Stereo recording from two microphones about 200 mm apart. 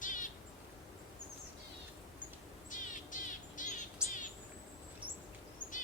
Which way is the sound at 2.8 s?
40° left (ahead or behind).